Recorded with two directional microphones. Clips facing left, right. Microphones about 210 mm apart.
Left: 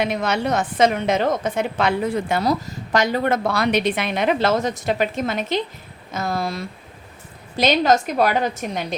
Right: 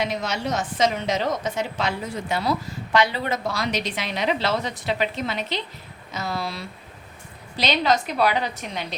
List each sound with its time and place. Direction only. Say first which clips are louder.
0.0 s a woman's voice: left 5 dB; 55° left (ahead or behind)
2.4 s a woman's voice: left 4 dB; 40° left (ahead or behind)